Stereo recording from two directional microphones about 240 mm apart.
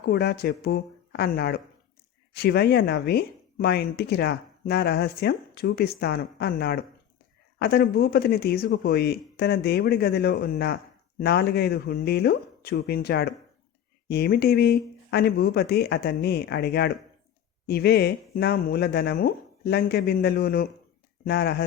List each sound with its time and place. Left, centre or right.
0.0 s speech: left